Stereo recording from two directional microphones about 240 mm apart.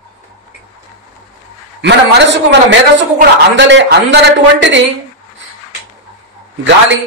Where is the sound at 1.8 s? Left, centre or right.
Right.